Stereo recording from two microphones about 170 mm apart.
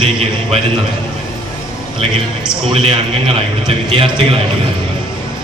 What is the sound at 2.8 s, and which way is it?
A man's voice, 35° right (ahead or behind).